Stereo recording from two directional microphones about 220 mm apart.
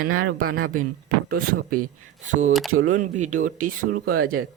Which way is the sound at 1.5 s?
40° right (ahead or behind).